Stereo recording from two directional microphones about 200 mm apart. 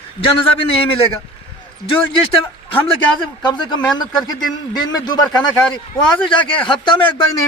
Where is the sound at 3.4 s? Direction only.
20° left (ahead or behind).